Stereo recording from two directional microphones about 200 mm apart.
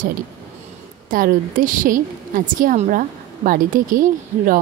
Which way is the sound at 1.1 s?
45° right (ahead or behind).